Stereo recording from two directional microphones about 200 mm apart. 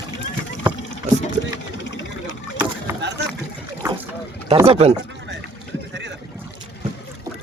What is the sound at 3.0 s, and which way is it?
Boat, 60° right (ahead or behind).